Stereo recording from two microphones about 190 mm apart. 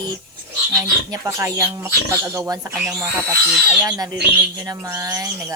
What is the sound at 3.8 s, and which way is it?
Speech, 15° right (ahead or behind).